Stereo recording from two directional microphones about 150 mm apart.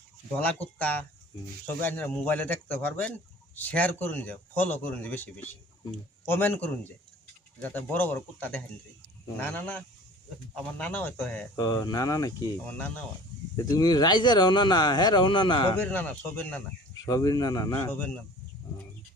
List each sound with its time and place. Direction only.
0.3 s speech: 10° left (ahead or behind)
11.5 s speech: 25° left (ahead or behind)
12.6 s speech: 10° left (ahead or behind)
13.6 s speech: 25° left (ahead or behind)
15.7 s speech: 10° left (ahead or behind)
17.1 s speech: 25° left (ahead or behind)